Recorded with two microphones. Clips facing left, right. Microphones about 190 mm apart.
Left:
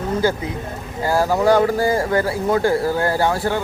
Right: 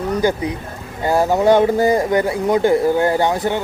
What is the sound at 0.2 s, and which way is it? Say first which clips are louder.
A man's voice: right 2 dB; 15° right (ahead or behind).